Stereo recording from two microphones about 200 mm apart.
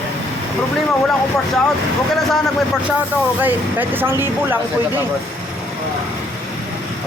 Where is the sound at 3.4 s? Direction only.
10° right (ahead or behind).